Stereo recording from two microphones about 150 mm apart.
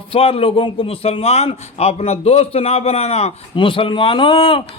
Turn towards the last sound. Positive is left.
turn(degrees=35)  # may be behind; listen again after turning